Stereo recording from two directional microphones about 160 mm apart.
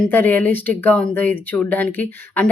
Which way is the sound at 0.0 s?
10° left (ahead or behind).